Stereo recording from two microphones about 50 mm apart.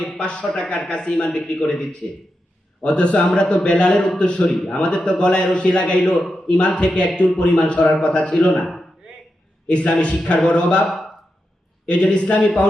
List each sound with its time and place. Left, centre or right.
0.1 s a man's voice: centre
8.6 s a sound: centre
9.6 s a man's voice: left
11.9 s a man's voice: left